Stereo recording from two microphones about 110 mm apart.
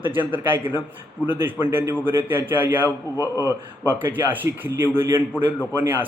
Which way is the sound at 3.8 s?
20° right (ahead or behind).